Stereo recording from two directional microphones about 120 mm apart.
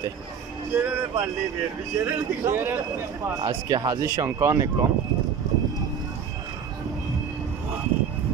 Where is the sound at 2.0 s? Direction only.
20° right (ahead or behind).